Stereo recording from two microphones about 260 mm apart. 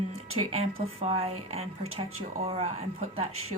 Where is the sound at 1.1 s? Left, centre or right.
Right.